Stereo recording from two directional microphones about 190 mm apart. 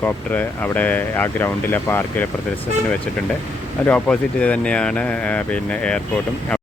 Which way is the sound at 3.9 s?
5° left (ahead or behind).